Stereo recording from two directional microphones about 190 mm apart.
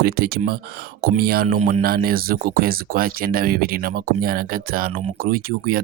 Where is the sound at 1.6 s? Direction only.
35° right (ahead or behind).